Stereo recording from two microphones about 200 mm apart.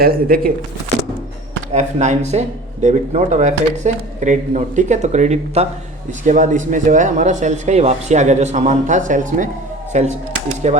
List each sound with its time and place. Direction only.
0.0 s speech: 50° right (ahead or behind)
1.7 s speech: 35° right (ahead or behind)